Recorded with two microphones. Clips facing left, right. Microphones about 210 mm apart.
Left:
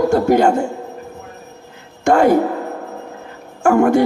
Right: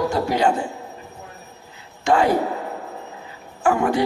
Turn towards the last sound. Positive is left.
turn(degrees=50)  # may be behind; listen again after turning